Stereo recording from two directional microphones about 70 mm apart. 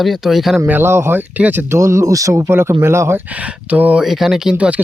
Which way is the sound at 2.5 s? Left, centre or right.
Right.